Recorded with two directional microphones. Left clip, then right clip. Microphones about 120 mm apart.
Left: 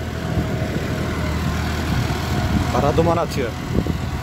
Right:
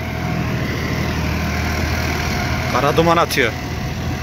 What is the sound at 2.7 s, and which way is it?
Speech, 5° left (ahead or behind).